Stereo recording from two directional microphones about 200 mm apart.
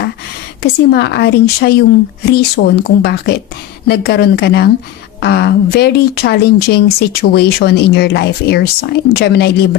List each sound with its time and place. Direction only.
0.6 s speech: 55° left (ahead or behind)